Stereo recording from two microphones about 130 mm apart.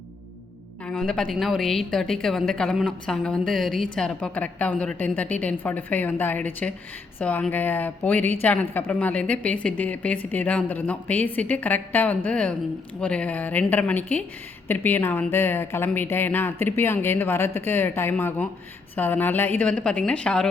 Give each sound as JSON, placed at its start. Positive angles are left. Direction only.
{"t": 0.9, "sound": "a woman's voice", "side_deg": 5}